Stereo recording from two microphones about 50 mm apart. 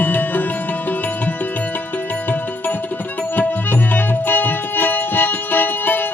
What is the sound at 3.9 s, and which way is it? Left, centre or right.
Music, left.